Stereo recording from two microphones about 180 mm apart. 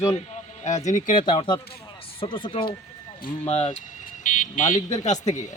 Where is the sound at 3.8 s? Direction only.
45° left (ahead or behind).